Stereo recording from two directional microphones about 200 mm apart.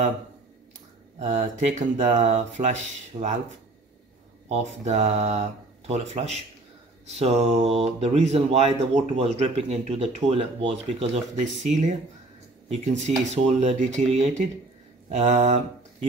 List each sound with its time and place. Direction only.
1.2 s speech: 35° right (ahead or behind)
4.5 s speech: 35° right (ahead or behind)
12.6 s speech: 35° right (ahead or behind)